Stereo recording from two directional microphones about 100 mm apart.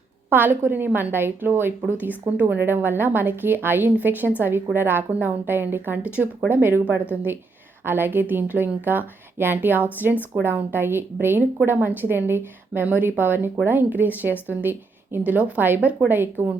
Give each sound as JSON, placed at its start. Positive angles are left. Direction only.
{"t": 0.3, "sound": "a woman's voice", "side_deg": -20}